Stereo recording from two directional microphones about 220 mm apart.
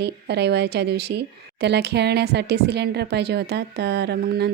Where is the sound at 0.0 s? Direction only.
50° right (ahead or behind).